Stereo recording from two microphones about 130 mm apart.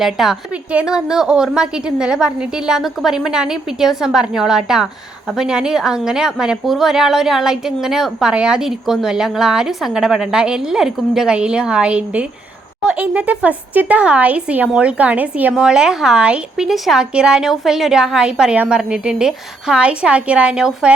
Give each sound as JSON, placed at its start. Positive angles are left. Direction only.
{"t": 0.0, "sound": "a woman's voice", "side_deg": -5}